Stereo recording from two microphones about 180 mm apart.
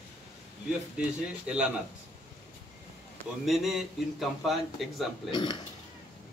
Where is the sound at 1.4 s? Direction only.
5° right (ahead or behind).